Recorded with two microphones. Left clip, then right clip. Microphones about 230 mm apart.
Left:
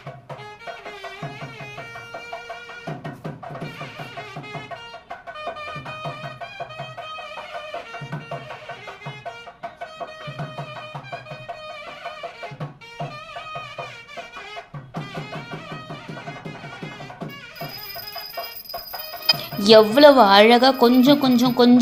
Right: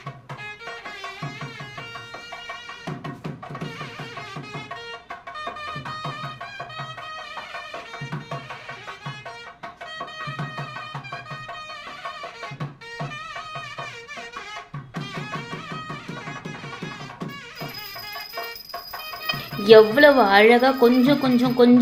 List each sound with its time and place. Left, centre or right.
19.6 s speech: left